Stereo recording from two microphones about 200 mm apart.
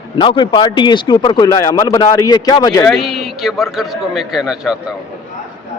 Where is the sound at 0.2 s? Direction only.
25° left (ahead or behind).